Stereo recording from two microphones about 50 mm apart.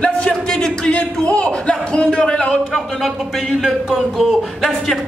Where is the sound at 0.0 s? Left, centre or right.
Centre.